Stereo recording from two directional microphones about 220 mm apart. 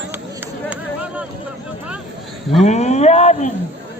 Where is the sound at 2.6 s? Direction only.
30° left (ahead or behind).